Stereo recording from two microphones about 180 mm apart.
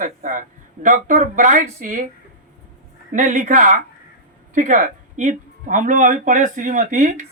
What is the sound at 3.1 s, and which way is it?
Speech, 45° right (ahead or behind).